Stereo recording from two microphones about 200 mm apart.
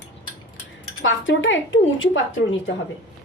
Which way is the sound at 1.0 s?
70° left (ahead or behind).